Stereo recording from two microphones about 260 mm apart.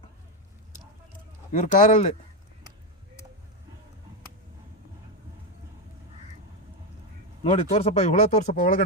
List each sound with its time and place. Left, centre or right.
1.5 s speech: left
7.4 s speech: left